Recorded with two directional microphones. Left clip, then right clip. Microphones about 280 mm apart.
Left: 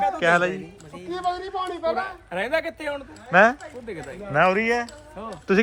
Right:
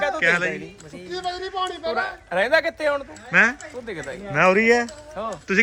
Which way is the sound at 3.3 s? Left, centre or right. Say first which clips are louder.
Left 1 dB; centre.